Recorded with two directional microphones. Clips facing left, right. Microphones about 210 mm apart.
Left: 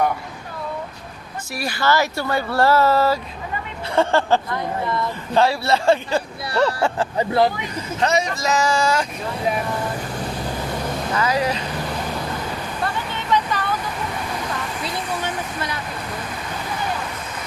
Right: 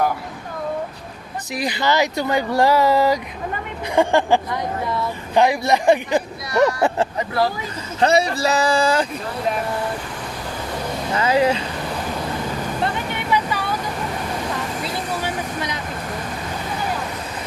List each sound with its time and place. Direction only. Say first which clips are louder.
1.5 s speech: right 1 dB; 20° right (ahead or behind)
7.2 s speech: left 6 dB; 25° left (ahead or behind)
8.0 s speech: right 4 dB; 35° right (ahead or behind)
11.1 s speech: right 4 dB; 25° right (ahead or behind)
12.8 s vehicle: right 1 dB; 15° right (ahead or behind)